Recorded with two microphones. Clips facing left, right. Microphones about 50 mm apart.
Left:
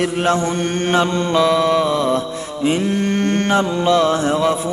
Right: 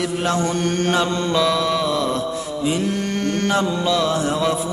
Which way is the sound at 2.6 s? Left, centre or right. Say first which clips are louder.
Left 5 dB; left.